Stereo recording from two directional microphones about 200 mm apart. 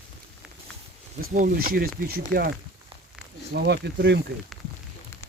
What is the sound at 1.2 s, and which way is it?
Speech, 40° right (ahead or behind).